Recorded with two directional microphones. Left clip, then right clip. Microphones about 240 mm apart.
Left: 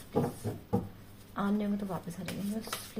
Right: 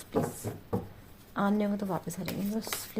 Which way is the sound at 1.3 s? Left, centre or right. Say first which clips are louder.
Right 4 dB; right.